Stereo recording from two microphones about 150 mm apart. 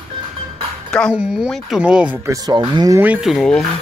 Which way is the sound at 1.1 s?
5° right (ahead or behind).